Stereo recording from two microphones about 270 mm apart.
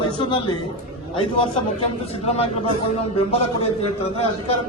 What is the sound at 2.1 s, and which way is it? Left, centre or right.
A man's voice, left.